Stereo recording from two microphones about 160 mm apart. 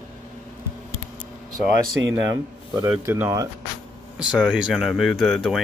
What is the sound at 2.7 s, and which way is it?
Speech, 15° right (ahead or behind).